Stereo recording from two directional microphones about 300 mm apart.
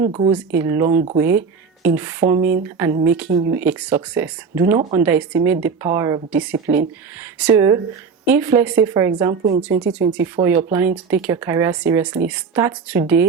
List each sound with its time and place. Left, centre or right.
0.0 s speech: centre
0.3 s speech: centre